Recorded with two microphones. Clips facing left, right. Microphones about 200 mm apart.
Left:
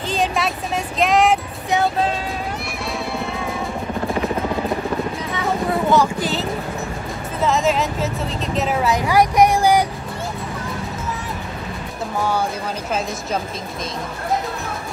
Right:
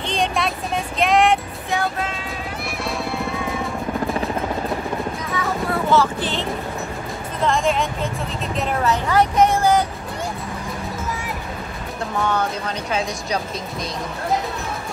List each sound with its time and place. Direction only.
0.0 s a sound: centre (ahead or behind)
1.7 s speech: 25° left (ahead or behind)
5.3 s music: 20° left (ahead or behind)
7.4 s speech: 5° left (ahead or behind)
12.3 s speech: 5° left (ahead or behind)